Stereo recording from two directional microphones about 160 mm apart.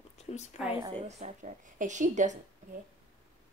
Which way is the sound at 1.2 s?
50° right (ahead or behind).